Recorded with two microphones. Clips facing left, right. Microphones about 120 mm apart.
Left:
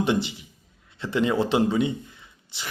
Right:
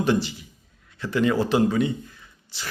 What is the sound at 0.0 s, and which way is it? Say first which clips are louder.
Speech: right 1 dB; 20° left (ahead or behind).